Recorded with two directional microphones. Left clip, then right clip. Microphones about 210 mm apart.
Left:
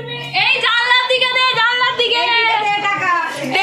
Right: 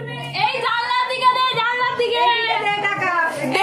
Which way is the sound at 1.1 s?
20° left (ahead or behind).